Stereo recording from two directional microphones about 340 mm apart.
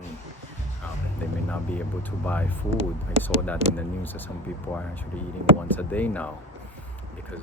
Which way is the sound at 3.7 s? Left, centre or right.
Centre.